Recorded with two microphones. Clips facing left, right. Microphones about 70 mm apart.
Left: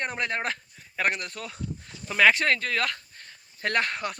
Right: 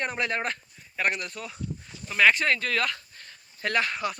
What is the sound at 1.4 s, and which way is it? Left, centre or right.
Speech, left.